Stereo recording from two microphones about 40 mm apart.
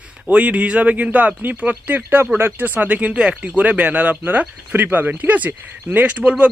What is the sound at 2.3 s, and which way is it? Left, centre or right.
Speech, right.